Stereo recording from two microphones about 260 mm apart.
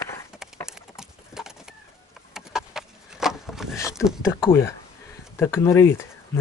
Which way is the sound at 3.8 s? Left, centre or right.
Centre.